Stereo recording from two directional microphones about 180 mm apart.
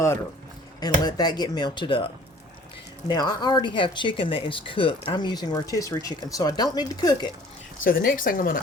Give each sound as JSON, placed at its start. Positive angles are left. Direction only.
{"t": 0.8, "sound": "speech", "side_deg": 20}
{"t": 3.1, "sound": "speech", "side_deg": 25}
{"t": 7.9, "sound": "speech", "side_deg": 50}